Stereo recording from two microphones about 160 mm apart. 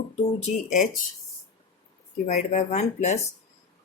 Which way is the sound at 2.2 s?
50° left (ahead or behind).